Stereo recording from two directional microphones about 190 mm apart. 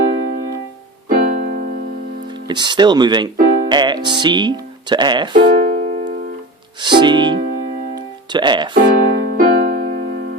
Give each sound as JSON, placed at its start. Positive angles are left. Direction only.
{"t": 1.0, "sound": "keyboard", "side_deg": -45}
{"t": 2.5, "sound": "speech", "side_deg": -25}
{"t": 3.3, "sound": "music", "side_deg": -50}
{"t": 3.7, "sound": "speech", "side_deg": -25}
{"t": 5.5, "sound": "music", "side_deg": -45}
{"t": 6.8, "sound": "speech", "side_deg": -25}
{"t": 8.7, "sound": "music", "side_deg": -45}